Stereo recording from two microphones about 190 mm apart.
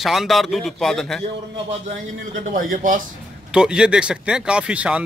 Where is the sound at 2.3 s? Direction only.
45° right (ahead or behind).